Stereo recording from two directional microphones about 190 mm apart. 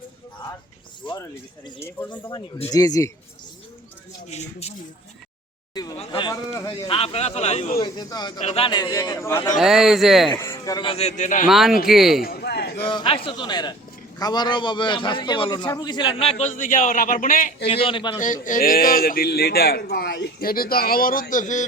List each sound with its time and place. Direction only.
1.0 s a man's voice: 25° left (ahead or behind)
4.3 s speech: 35° left (ahead or behind)
6.0 s a man's voice: 25° left (ahead or behind)
6.9 s speech: 30° left (ahead or behind)
7.8 s a man's voice: 20° left (ahead or behind)
8.4 s a man's voice: 35° left (ahead or behind); by 9.6 s 15° left (ahead or behind)
9.6 s speech: centre (ahead or behind)
10.3 s a man's voice: 15° left (ahead or behind); by 11.4 s 40° left (ahead or behind)
11.4 s speech: centre (ahead or behind)
12.2 s speech: 55° left (ahead or behind)
12.8 s a man's voice: 25° left (ahead or behind); by 17.7 s 45° left (ahead or behind)
17.7 s a man's voice: 30° left (ahead or behind)
18.2 s a man's voice: 40° left (ahead or behind)